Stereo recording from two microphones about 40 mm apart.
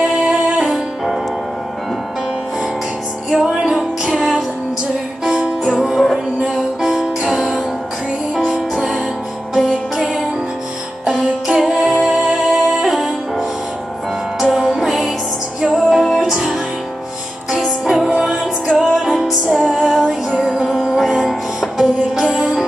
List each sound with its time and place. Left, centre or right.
0.0 s music: centre
3.7 s music: centre
5.6 s music: centre
9.5 s music: centre